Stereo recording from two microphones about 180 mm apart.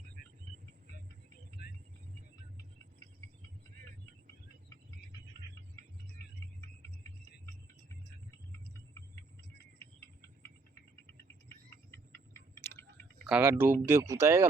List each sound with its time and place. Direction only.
12.3 s tick-tock: 15° left (ahead or behind)
13.2 s speech: 10° right (ahead or behind)